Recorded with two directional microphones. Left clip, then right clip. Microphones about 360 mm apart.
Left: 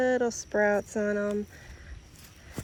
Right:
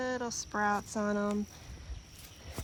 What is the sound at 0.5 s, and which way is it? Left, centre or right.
Speech, right.